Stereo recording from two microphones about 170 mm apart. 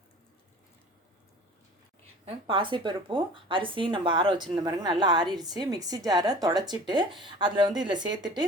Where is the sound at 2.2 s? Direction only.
30° right (ahead or behind).